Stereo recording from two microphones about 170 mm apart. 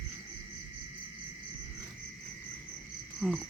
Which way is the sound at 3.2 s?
5° right (ahead or behind).